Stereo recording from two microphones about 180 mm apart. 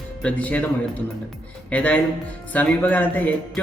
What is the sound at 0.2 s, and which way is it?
Speech, 5° left (ahead or behind).